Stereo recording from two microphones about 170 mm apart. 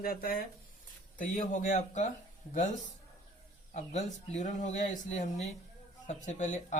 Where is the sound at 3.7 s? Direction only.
45° left (ahead or behind).